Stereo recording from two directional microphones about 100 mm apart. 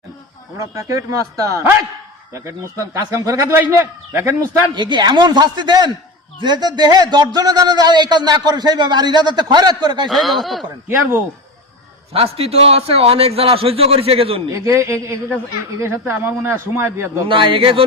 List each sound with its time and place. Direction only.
0.5 s a man's voice: 35° right (ahead or behind)
4.7 s speech: 50° right (ahead or behind)
10.1 s speech: centre (ahead or behind)
10.8 s speech: 20° right (ahead or behind)
12.1 s a man's voice: 75° right (ahead or behind)
14.5 s speech: 30° right (ahead or behind)
17.2 s a man's voice: 60° right (ahead or behind)